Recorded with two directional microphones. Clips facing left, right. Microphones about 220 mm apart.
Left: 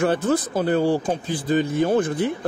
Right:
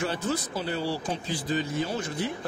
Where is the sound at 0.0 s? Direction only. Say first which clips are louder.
Left 9 dB; 50° left (ahead or behind).